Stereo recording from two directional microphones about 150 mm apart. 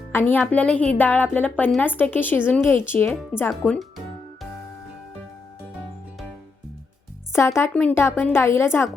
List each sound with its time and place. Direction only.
0.1 s speech: 15° left (ahead or behind)
3.5 s music: centre (ahead or behind)
7.3 s speech: 15° left (ahead or behind)